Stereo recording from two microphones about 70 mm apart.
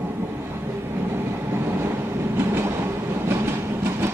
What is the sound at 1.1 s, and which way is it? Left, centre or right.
Train, right.